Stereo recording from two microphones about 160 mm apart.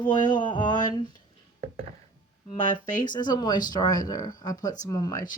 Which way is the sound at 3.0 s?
25° left (ahead or behind).